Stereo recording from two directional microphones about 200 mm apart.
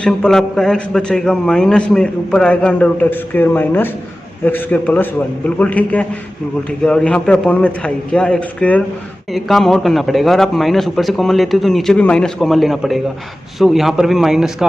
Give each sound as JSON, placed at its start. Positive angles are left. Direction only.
{"t": 0.0, "sound": "a man's voice", "side_deg": 5}